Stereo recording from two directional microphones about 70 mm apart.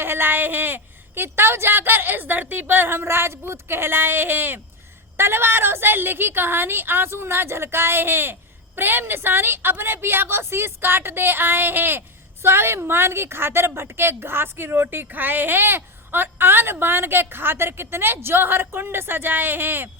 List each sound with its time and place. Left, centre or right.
0.0 s a woman's voice: right